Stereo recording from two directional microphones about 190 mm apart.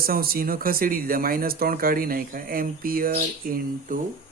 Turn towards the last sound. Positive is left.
turn(degrees=-45)  # may be behind; listen again after turning